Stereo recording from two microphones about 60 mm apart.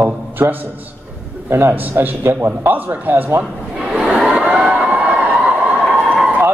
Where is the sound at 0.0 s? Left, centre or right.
Right.